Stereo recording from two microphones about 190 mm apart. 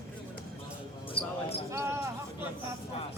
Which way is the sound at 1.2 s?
30° left (ahead or behind).